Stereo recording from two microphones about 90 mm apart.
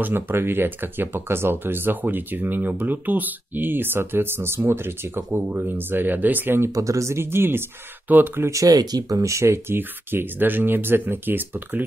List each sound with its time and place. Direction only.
0.0 s speech: 25° right (ahead or behind)
6.7 s speech: 40° right (ahead or behind); by 8.5 s 20° right (ahead or behind)
8.5 s speech: 40° right (ahead or behind); by 11.8 s 20° right (ahead or behind)